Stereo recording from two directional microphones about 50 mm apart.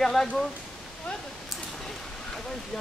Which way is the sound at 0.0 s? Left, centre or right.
Centre.